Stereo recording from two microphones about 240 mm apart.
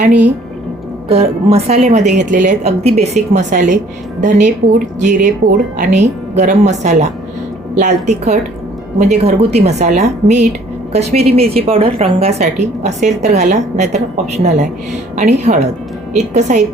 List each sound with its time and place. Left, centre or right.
1.0 s a woman's voice: right